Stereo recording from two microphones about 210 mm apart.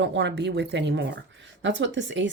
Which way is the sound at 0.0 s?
60° right (ahead or behind).